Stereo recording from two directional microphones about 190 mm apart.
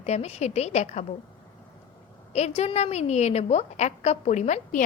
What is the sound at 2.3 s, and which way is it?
A woman's voice, 35° left (ahead or behind).